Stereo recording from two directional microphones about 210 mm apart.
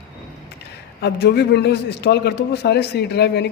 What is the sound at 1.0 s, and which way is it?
A man's voice, 50° left (ahead or behind).